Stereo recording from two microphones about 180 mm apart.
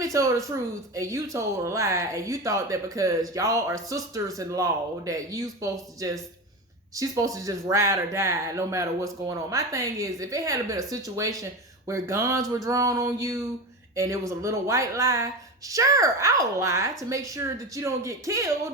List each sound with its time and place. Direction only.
0.0 s speech: 20° right (ahead or behind)